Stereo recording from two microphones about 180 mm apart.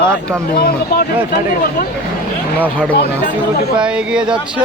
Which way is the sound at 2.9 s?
60° left (ahead or behind).